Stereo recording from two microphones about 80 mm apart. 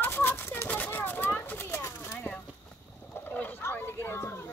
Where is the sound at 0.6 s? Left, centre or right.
Centre.